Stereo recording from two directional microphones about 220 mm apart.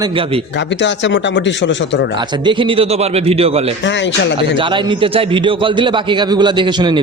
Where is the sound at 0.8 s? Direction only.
55° left (ahead or behind).